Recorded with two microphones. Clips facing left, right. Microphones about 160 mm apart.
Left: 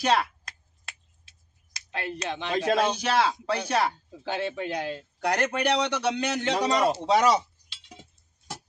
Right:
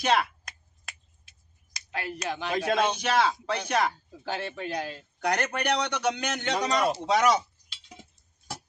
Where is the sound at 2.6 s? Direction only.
35° left (ahead or behind).